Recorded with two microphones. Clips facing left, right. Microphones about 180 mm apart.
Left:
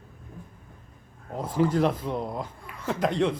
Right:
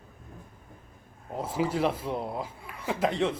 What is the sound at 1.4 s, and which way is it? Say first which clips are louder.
Speech: left 4 dB; 5° right (ahead or behind).